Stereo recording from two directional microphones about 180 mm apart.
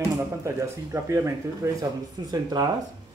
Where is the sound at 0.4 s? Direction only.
15° right (ahead or behind).